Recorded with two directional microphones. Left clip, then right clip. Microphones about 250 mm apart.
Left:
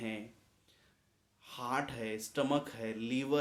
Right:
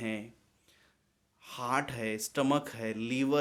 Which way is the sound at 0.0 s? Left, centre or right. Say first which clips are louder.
Right 4 dB; right.